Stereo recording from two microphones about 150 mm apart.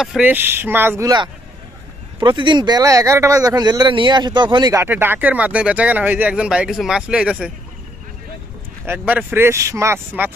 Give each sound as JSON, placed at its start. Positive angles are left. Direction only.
{"t": 0.0, "sound": "speech", "side_deg": -5}
{"t": 2.1, "sound": "speech", "side_deg": -30}
{"t": 4.7, "sound": "speech", "side_deg": -15}
{"t": 8.8, "sound": "speech", "side_deg": -10}